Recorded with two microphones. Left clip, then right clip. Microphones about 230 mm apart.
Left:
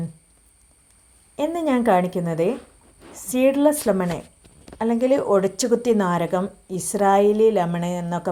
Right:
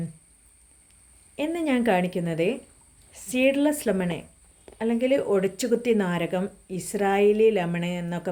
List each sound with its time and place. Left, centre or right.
1.4 s a woman's voice: centre